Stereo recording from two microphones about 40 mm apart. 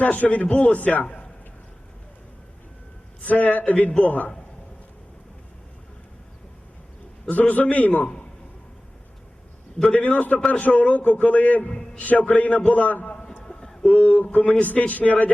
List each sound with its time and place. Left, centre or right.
0.0 s a man's voice: left
3.2 s a man's voice: left
7.3 s a man's voice: left
8.0 s a man's voice: centre
9.8 s a man's voice: left
13.4 s a sound: centre
13.8 s a man's voice: left